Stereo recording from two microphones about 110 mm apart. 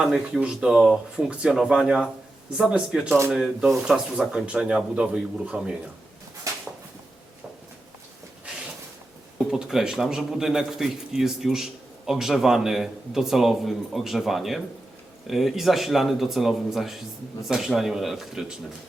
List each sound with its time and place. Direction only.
0.0 s speech: 5° right (ahead or behind)
6.5 s a sound: 30° right (ahead or behind)
9.5 s a man's voice: 5° right (ahead or behind)